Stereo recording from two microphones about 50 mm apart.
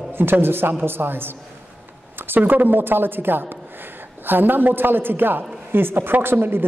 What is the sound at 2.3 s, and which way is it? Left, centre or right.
A man's voice, right.